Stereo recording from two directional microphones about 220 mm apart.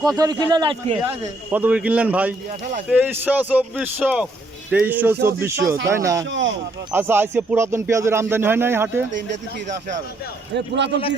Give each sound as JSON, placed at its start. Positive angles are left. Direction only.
{"t": 0.2, "sound": "speech", "side_deg": -15}
{"t": 1.0, "sound": "speech", "side_deg": -10}
{"t": 10.5, "sound": "a man's voice", "side_deg": -50}